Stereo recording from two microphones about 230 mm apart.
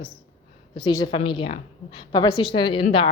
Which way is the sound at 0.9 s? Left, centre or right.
Centre.